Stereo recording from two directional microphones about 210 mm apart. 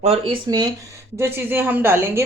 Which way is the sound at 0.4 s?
20° right (ahead or behind).